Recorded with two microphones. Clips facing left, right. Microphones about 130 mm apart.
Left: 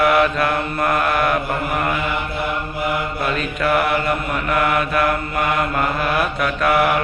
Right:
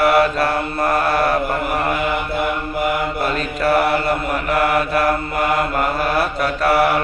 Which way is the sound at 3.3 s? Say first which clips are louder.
Right 1 dB; 35° right (ahead or behind).